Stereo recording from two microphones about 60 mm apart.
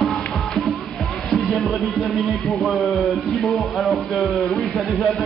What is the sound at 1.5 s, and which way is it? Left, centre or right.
Speech, centre.